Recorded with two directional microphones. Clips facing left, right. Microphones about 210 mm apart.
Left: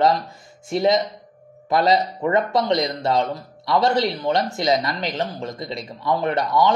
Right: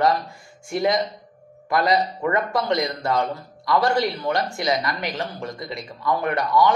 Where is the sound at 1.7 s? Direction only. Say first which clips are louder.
Left 2 dB; 25° left (ahead or behind).